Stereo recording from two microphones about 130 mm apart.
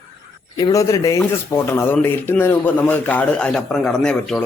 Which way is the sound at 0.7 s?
25° left (ahead or behind).